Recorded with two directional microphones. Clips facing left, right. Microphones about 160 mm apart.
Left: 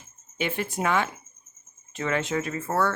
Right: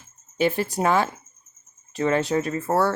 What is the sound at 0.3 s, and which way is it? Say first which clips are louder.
Speech: right 6 dB; 35° right (ahead or behind).